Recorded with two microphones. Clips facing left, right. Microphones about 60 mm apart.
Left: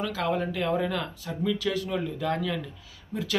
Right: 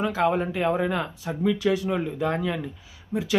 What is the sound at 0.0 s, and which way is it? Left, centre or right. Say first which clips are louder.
Speech: right 5 dB; right.